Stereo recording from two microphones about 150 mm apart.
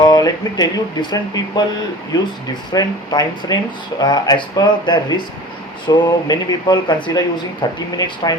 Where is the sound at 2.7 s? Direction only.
25° left (ahead or behind).